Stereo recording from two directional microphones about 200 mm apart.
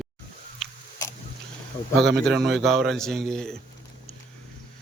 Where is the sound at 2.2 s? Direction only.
Centre (ahead or behind).